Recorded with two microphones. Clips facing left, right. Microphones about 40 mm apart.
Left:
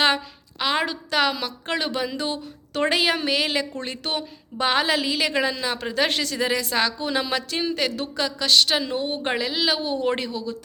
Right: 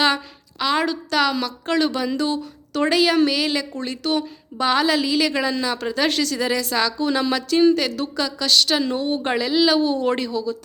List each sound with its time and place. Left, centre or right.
0.6 s speech: left